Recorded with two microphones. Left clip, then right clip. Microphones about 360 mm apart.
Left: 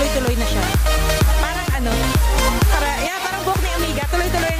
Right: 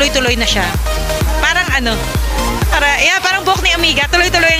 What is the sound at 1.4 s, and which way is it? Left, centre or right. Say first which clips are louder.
Music: right 10 dB; left.